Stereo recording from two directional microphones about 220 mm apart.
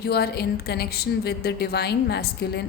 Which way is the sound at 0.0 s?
45° left (ahead or behind).